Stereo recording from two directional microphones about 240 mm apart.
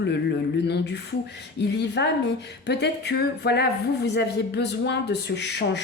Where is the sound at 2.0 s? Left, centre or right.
Left.